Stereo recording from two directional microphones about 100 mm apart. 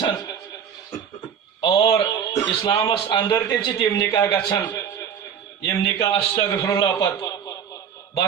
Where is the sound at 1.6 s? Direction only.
45° left (ahead or behind).